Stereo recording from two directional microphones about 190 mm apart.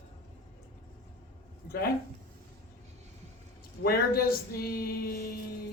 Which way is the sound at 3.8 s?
50° left (ahead or behind).